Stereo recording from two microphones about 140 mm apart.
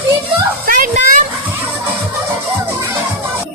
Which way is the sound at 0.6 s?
75° right (ahead or behind).